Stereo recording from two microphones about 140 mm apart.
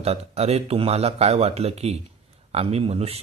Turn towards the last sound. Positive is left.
turn(degrees=-45)  # may be behind; listen again after turning